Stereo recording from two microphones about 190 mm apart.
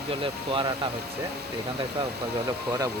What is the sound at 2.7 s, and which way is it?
Speech, 20° right (ahead or behind).